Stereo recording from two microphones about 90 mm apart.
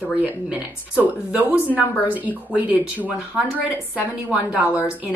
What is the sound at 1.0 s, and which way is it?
Speech, 15° right (ahead or behind).